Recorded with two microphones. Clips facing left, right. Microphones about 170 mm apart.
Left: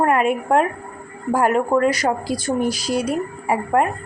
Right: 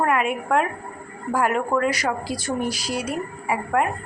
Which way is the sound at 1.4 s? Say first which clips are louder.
Left 4 dB; 35° left (ahead or behind).